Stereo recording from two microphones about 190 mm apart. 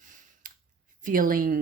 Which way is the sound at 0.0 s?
40° right (ahead or behind).